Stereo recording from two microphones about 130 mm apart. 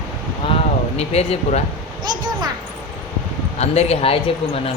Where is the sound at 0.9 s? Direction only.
55° left (ahead or behind).